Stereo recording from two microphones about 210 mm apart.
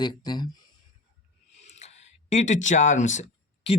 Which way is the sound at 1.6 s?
30° left (ahead or behind).